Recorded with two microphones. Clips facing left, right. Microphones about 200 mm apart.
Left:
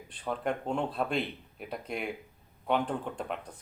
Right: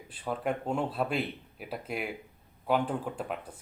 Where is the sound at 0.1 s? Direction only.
5° right (ahead or behind).